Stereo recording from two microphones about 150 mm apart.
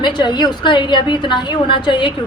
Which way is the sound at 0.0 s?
30° left (ahead or behind).